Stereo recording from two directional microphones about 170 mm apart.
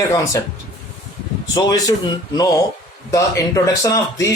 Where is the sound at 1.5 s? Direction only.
20° left (ahead or behind).